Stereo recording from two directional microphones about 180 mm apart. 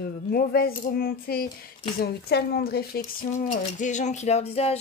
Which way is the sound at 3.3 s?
40° left (ahead or behind).